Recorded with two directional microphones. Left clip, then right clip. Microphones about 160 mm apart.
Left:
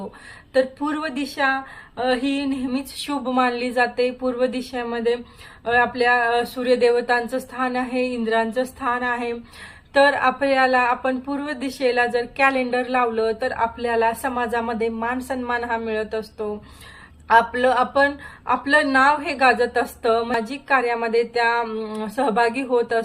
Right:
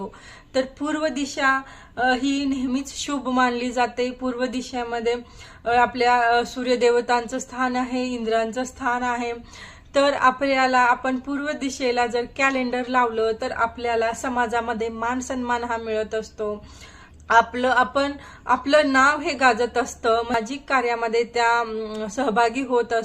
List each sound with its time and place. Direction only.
0.5 s speech: 10° right (ahead or behind)